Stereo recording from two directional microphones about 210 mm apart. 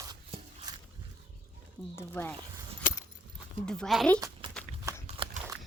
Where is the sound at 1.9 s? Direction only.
10° left (ahead or behind).